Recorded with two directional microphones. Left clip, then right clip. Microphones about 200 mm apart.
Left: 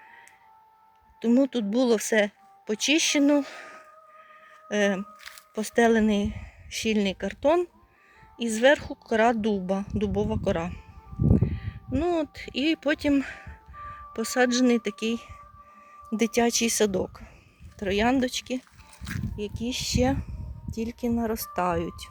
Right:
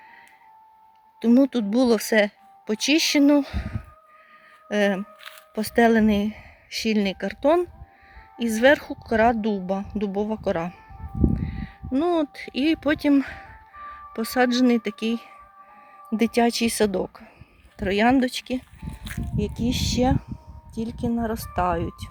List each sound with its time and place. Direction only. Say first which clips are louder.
1.2 s speech: right 4 dB; 15° right (ahead or behind)
19.4 s speech: right 5 dB; 30° right (ahead or behind)
20.7 s speech: right 1 dB; centre (ahead or behind)